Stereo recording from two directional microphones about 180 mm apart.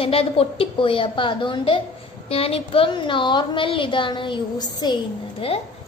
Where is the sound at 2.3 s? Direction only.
35° left (ahead or behind).